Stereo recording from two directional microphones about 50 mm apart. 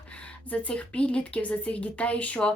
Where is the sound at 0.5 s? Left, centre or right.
Left.